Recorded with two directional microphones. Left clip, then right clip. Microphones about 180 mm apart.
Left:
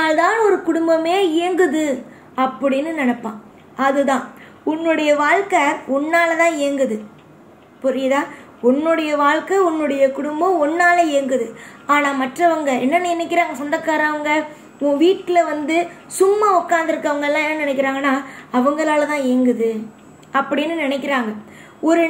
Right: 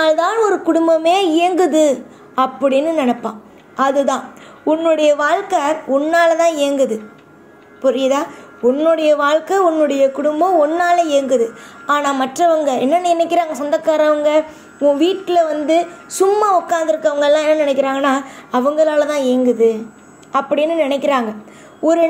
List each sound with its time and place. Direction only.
0.5 s a woman's voice: 35° right (ahead or behind)